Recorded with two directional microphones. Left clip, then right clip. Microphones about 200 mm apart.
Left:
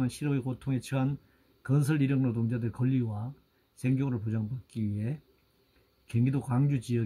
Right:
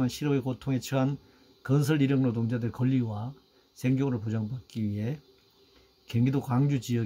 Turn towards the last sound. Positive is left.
turn(degrees=-5)  # may be behind; listen again after turning